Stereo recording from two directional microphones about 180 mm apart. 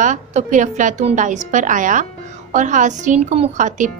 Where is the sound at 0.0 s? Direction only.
40° right (ahead or behind).